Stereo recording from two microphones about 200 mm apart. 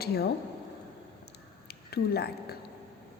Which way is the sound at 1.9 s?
50° left (ahead or behind).